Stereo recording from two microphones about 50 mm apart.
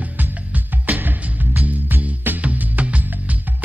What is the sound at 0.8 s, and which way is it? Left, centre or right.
Music, right.